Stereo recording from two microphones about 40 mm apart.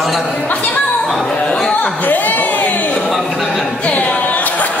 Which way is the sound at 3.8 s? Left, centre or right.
Left.